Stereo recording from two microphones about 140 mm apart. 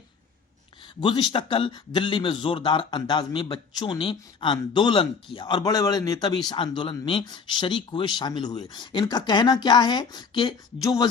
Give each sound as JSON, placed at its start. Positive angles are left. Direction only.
{"t": 1.0, "sound": "a man's voice", "side_deg": 35}